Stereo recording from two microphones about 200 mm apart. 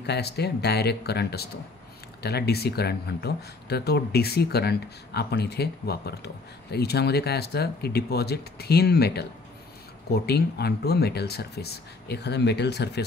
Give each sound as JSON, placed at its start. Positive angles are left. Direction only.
{"t": 0.0, "sound": "speech", "side_deg": 55}